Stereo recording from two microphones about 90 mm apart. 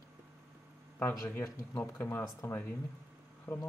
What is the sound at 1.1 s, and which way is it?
Speech, 40° left (ahead or behind).